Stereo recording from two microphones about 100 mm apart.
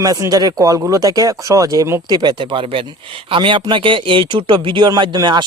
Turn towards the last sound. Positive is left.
turn(degrees=-45)  # may be behind; listen again after turning